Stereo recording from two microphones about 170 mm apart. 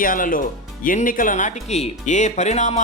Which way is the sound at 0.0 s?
55° left (ahead or behind).